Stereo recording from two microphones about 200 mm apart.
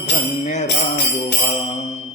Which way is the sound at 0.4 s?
35° left (ahead or behind).